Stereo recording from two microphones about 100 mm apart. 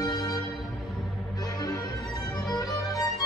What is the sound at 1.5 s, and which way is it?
Music, 35° left (ahead or behind).